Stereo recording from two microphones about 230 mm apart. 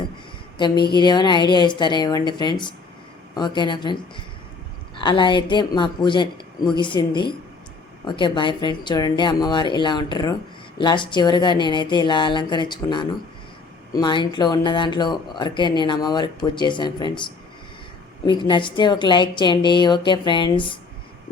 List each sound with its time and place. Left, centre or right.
0.9 s speech: centre
4.9 s a woman's voice: centre
18.3 s speech: centre